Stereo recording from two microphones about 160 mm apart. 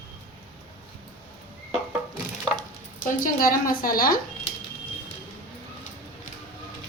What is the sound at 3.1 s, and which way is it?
A woman's voice, 60° left (ahead or behind).